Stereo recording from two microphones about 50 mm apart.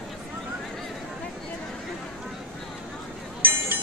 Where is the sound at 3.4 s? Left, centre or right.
Right.